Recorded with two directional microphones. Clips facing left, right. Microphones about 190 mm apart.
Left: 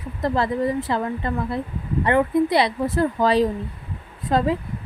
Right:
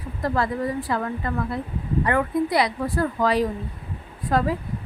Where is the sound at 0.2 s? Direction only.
25° left (ahead or behind).